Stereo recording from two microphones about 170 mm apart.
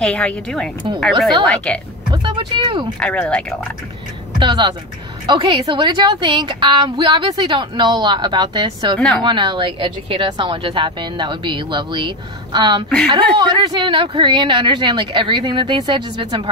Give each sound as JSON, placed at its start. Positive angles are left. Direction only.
{"t": 0.0, "sound": "speech", "side_deg": 5}
{"t": 2.0, "sound": "speech", "side_deg": -30}
{"t": 3.0, "sound": "speech", "side_deg": 5}
{"t": 4.4, "sound": "a woman's voice", "side_deg": -25}
{"t": 8.9, "sound": "speech", "side_deg": 5}
{"t": 9.2, "sound": "a woman's voice", "side_deg": -25}